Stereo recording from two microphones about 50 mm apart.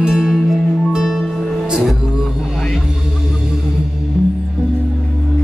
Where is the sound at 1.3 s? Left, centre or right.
Centre.